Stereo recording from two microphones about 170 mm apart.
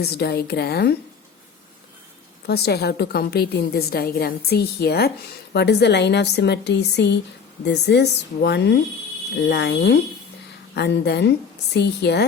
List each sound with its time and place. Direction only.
0.0 s a woman's voice: 70° left (ahead or behind)
2.5 s a woman's voice: 70° left (ahead or behind)